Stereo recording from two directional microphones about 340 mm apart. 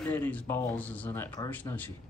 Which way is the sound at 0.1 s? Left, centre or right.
Centre.